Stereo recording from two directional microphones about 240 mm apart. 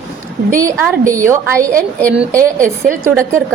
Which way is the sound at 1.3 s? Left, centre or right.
Centre.